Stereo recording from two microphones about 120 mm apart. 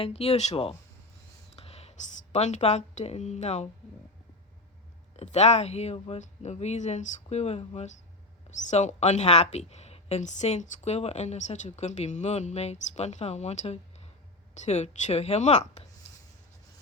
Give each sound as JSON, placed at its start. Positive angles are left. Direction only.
{"t": 0.0, "sound": "speech", "side_deg": 55}
{"t": 1.5, "sound": "whispering", "side_deg": 60}
{"t": 2.3, "sound": "a woman's voice", "side_deg": 70}
{"t": 5.1, "sound": "speech", "side_deg": 65}
{"t": 8.4, "sound": "a woman's voice", "side_deg": 75}